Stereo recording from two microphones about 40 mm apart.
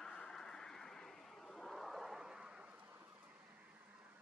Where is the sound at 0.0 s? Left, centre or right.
Centre.